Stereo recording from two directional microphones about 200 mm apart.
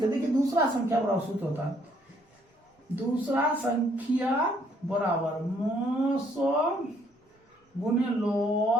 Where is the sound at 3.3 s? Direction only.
10° right (ahead or behind).